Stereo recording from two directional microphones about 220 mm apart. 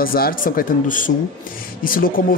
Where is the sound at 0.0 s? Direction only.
40° left (ahead or behind).